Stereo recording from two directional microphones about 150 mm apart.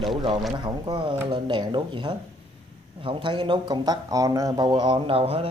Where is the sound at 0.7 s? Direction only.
30° right (ahead or behind).